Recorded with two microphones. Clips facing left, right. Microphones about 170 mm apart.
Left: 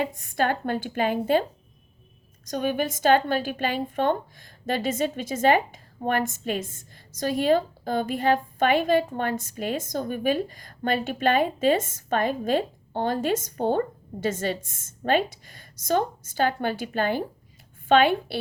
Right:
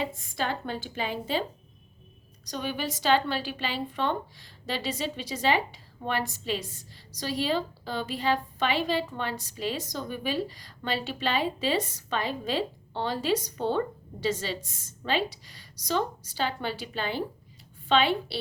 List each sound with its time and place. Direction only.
0.0 s a woman's voice: 50° left (ahead or behind)